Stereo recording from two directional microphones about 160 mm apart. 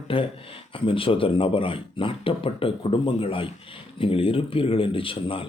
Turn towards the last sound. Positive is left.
turn(degrees=35)  # may be behind; listen again after turning